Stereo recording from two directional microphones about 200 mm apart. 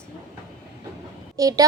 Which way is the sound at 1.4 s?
15° right (ahead or behind).